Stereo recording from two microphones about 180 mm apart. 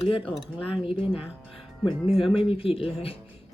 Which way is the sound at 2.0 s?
Centre (ahead or behind).